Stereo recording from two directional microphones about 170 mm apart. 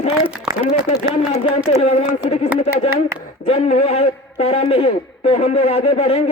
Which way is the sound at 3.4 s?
40° left (ahead or behind).